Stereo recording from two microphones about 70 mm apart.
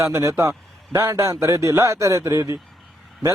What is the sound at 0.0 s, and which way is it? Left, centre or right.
A man's voice, right.